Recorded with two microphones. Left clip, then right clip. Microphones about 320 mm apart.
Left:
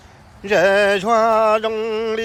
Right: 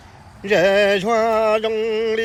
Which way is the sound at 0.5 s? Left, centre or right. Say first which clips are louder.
Left 1 dB; centre.